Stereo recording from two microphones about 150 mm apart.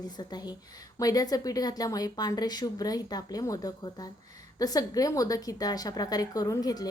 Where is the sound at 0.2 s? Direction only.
30° left (ahead or behind).